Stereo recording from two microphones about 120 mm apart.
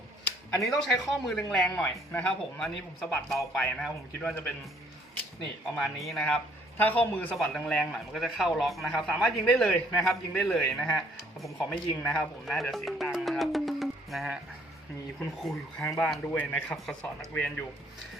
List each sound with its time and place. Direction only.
0.6 s a man's voice: centre (ahead or behind)
5.7 s a man's voice: centre (ahead or behind)
7.3 s a man's voice: centre (ahead or behind)
13.3 s music: centre (ahead or behind)
15.2 s a man's voice: centre (ahead or behind)
16.3 s a man's voice: 10° left (ahead or behind)